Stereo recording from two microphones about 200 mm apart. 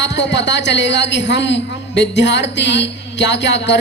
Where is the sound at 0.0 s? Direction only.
60° left (ahead or behind).